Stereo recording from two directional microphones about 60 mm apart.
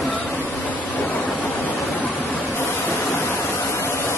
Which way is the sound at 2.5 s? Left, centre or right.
Left.